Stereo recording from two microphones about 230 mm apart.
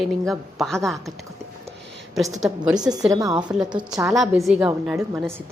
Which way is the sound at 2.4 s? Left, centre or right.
Centre.